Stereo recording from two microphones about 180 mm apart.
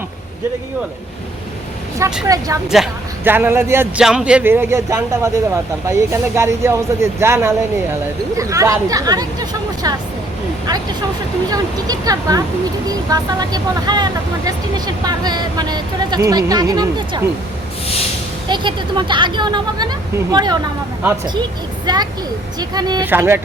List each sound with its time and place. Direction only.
2.2 s speech: 20° right (ahead or behind)
2.6 s speech: 5° right (ahead or behind); by 17.2 s 20° right (ahead or behind)
18.4 s speech: 25° right (ahead or behind)
21.9 s speech: 25° right (ahead or behind)
23.0 s speech: 10° right (ahead or behind)